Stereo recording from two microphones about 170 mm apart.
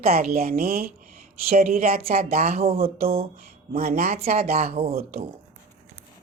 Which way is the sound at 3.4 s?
60° right (ahead or behind).